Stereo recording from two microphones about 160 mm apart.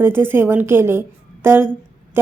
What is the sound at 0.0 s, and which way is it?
A woman's voice, 15° right (ahead or behind).